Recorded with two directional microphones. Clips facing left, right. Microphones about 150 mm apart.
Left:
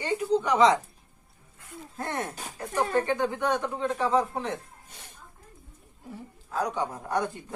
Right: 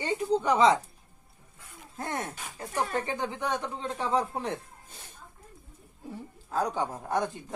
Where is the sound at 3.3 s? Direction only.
20° right (ahead or behind).